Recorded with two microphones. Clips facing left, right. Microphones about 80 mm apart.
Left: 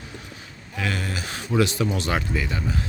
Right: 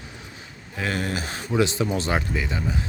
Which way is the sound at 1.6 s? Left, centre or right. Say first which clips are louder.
Right 1 dB; right.